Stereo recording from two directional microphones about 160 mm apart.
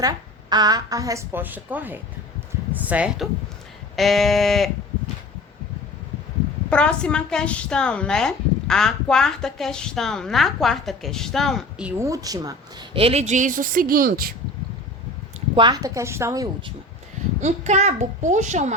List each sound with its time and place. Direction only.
0.5 s a woman's voice: 25° right (ahead or behind); by 4.7 s centre (ahead or behind)
6.7 s a woman's voice: 5° left (ahead or behind)
11.9 s a woman's voice: 20° right (ahead or behind)
13.0 s speech: 40° right (ahead or behind); by 14.3 s 65° right (ahead or behind)
15.5 s a woman's voice: 25° right (ahead or behind)
17.4 s a child's voice: 45° right (ahead or behind)